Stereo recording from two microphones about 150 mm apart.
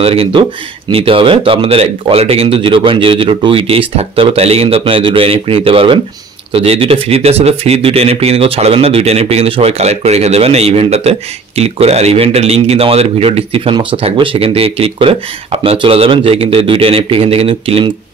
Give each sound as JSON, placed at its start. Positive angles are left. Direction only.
{"t": 0.0, "sound": "speech", "side_deg": -40}